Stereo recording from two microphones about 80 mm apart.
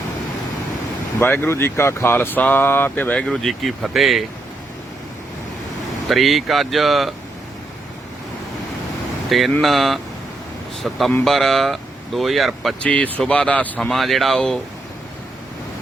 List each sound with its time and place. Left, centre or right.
1.2 s speech: left
3.2 s speech: centre
6.1 s speech: centre
9.6 s speech: centre
12.8 s speech: centre
13.7 s speech: centre